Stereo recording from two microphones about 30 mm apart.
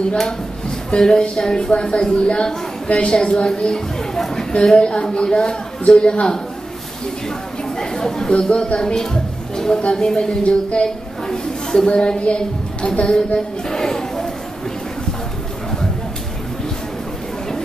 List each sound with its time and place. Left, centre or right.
0.7 s a woman's voice: left
7.8 s chatter: centre
8.3 s a woman's voice: left
8.7 s speech: left
10.4 s a woman's voice: left
11.2 s a sound: centre
11.9 s a woman's voice: left; by 14.3 s centre